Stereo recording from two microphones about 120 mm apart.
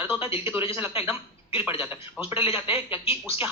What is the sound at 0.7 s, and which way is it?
Speech, 25° right (ahead or behind).